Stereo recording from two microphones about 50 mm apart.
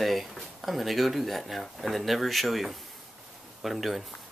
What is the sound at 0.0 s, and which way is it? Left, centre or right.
Speech, centre.